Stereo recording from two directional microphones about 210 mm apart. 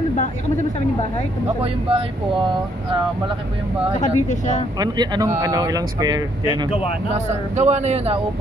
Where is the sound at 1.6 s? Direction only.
25° right (ahead or behind).